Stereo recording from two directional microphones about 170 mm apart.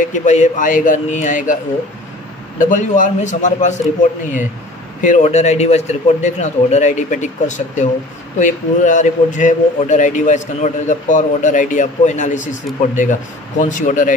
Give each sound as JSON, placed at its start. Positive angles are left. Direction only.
{"t": 0.0, "sound": "a man's voice", "side_deg": 45}
{"t": 2.6, "sound": "a man's voice", "side_deg": 50}
{"t": 5.0, "sound": "a man's voice", "side_deg": 45}
{"t": 13.6, "sound": "a man's voice", "side_deg": 45}